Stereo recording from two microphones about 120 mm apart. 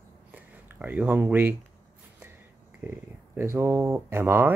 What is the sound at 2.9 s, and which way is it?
Speech, 20° right (ahead or behind).